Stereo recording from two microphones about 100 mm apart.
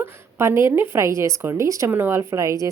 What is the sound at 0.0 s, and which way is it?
A woman's voice, 25° right (ahead or behind).